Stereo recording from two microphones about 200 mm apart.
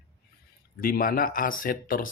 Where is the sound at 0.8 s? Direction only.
45° left (ahead or behind).